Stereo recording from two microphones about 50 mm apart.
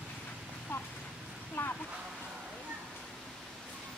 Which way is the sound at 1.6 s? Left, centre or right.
Left.